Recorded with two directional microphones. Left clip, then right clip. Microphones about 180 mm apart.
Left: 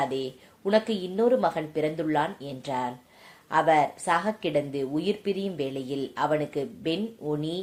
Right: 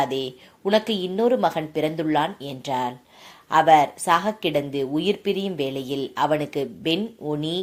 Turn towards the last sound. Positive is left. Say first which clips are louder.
# right 4 dB
turn(degrees=-25)  # may be behind; listen again after turning